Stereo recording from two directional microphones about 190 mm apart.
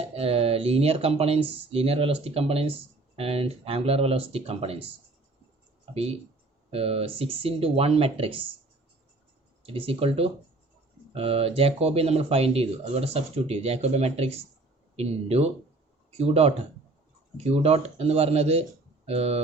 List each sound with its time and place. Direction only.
0.1 s speech: 30° right (ahead or behind)
5.9 s speech: 30° right (ahead or behind)
9.6 s speech: 30° right (ahead or behind)